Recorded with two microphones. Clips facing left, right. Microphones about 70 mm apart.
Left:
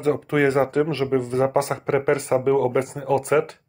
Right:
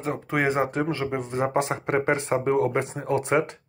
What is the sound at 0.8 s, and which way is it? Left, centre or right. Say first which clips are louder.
Speech: left 5 dB; right.